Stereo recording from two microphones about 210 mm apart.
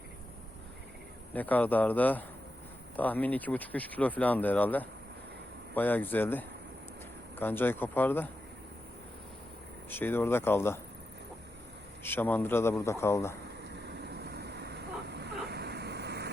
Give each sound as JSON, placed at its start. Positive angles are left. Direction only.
{"t": 1.3, "sound": "speech", "side_deg": 10}
{"t": 9.9, "sound": "speech", "side_deg": 10}
{"t": 12.0, "sound": "speech", "side_deg": 10}
{"t": 13.7, "sound": "vehicle", "side_deg": -55}